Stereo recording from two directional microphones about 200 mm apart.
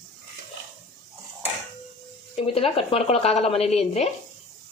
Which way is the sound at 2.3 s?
30° left (ahead or behind).